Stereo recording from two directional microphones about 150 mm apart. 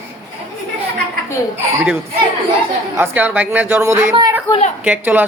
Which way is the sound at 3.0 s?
15° right (ahead or behind).